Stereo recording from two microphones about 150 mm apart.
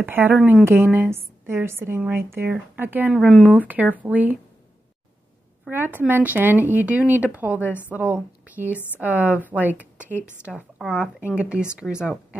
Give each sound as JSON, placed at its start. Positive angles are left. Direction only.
{"t": 0.0, "sound": "a woman's voice", "side_deg": -15}
{"t": 3.1, "sound": "a woman's voice", "side_deg": 0}
{"t": 5.7, "sound": "a woman's voice", "side_deg": -15}